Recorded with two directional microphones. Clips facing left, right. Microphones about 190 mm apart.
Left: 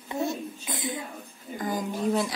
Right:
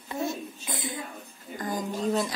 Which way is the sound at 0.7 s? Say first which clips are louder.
Left 2 dB; 20° left (ahead or behind).